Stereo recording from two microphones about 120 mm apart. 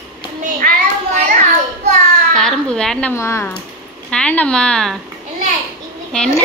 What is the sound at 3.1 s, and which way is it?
Speech, 20° left (ahead or behind).